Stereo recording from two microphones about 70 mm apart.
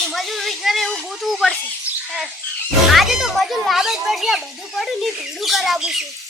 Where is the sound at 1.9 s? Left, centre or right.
Right.